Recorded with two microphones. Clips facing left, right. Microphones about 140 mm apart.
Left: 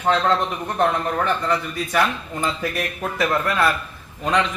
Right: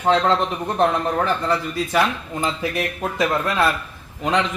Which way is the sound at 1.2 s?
30° right (ahead or behind).